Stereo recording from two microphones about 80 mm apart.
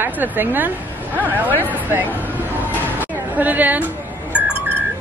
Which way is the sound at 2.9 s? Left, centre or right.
Right.